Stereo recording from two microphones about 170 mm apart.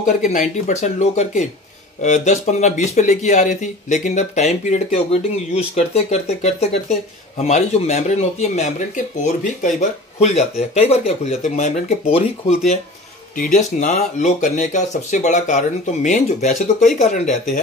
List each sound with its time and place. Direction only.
0.0 s speech: 45° left (ahead or behind)
13.4 s speech: 50° left (ahead or behind)